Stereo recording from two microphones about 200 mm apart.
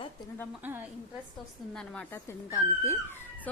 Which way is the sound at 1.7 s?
5° left (ahead or behind).